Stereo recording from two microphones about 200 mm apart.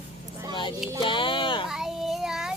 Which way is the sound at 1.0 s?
25° left (ahead or behind).